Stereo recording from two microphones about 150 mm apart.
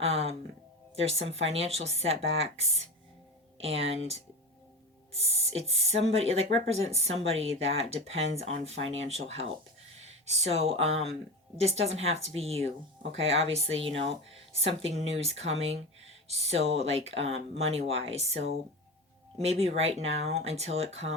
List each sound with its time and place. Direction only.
0.0 s speech: 45° right (ahead or behind)
5.5 s speech: 45° right (ahead or behind)